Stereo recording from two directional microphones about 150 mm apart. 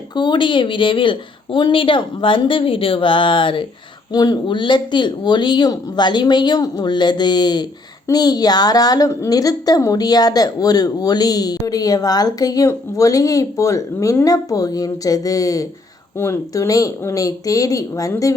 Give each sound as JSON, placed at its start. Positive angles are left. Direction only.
{"t": 0.2, "sound": "speech", "side_deg": 30}